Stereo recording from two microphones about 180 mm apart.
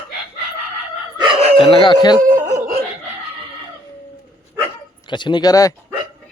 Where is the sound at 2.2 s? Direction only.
50° right (ahead or behind).